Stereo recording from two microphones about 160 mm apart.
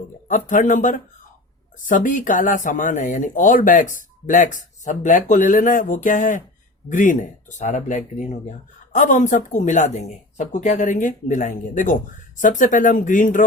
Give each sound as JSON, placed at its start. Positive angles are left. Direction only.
{"t": 0.3, "sound": "speech", "side_deg": 55}